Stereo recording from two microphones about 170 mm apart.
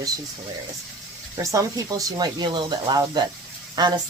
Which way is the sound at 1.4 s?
20° right (ahead or behind).